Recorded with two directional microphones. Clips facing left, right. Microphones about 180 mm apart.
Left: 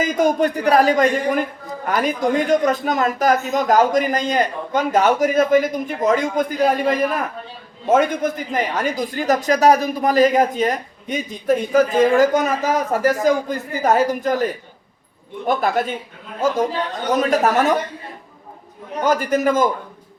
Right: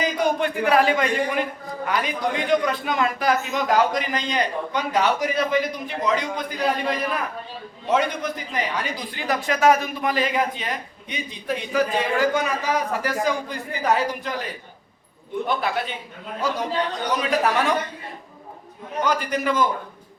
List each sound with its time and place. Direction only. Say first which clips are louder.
0.0 s a man's voice: left 5 dB; 45° left (ahead or behind)
19.0 s speech: left 6 dB; 45° left (ahead or behind)